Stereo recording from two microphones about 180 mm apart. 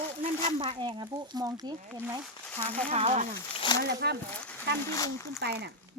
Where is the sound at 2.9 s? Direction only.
35° right (ahead or behind).